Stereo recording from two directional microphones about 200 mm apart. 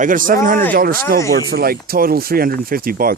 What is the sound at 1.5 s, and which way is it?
Speech, 50° right (ahead or behind).